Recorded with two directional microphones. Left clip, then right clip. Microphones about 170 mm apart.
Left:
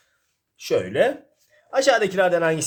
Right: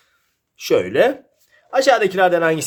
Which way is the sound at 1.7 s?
15° right (ahead or behind).